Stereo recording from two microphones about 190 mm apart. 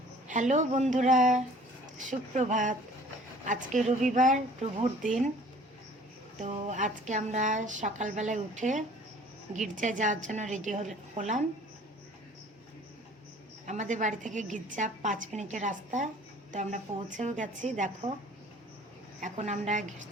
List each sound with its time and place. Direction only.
0.3 s speech: 40° right (ahead or behind)
6.4 s speech: 40° right (ahead or behind)
13.7 s speech: 40° right (ahead or behind)
19.2 s speech: 40° right (ahead or behind)